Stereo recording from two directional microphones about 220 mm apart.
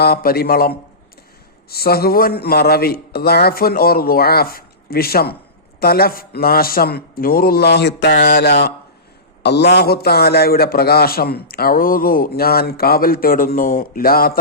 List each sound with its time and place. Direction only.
0.0 s a man's voice: 45° left (ahead or behind)